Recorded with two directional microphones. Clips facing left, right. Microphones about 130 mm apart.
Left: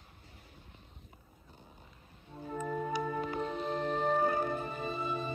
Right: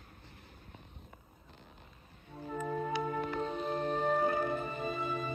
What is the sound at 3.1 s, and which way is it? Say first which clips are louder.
Music: even; 15° left (ahead or behind).